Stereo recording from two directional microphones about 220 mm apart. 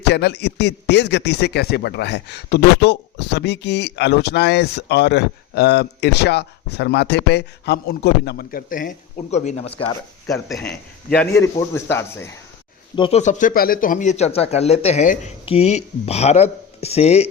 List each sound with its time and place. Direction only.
0.0 s a man's voice: 50° left (ahead or behind); by 9.8 s 30° left (ahead or behind)
11.1 s a man's voice: 10° left (ahead or behind)
13.0 s speech: 30° left (ahead or behind)